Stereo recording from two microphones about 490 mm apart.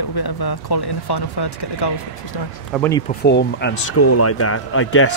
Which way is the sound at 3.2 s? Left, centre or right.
Left.